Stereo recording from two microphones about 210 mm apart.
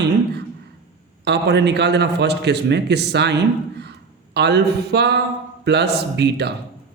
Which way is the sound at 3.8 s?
50° right (ahead or behind).